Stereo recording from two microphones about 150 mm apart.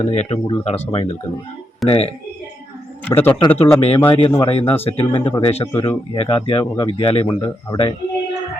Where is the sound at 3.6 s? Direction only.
40° left (ahead or behind).